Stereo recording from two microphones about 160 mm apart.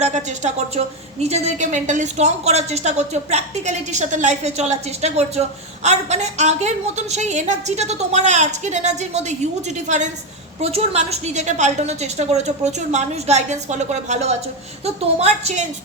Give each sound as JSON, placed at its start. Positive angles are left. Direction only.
{"t": 0.0, "sound": "a woman's voice", "side_deg": -45}